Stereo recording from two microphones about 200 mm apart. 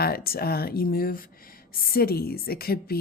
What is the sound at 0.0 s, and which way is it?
A woman's voice, 50° left (ahead or behind).